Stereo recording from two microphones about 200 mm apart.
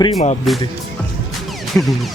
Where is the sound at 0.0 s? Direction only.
30° left (ahead or behind).